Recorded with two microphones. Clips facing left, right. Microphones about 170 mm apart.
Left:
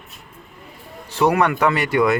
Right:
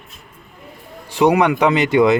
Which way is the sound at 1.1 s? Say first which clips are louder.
Right 3 dB; 15° right (ahead or behind).